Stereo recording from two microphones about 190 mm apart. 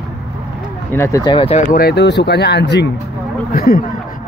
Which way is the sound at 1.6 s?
55° left (ahead or behind).